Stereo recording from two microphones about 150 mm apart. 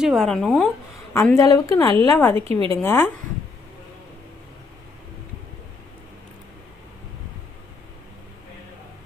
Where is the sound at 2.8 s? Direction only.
15° left (ahead or behind).